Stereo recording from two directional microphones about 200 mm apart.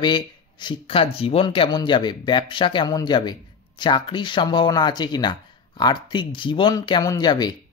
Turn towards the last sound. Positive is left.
turn(degrees=20)  # may be behind; listen again after turning